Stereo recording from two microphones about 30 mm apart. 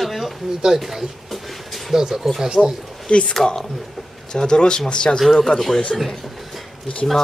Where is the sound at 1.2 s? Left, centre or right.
Centre.